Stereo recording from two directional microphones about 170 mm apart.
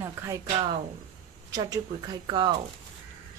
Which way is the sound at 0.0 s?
20° right (ahead or behind).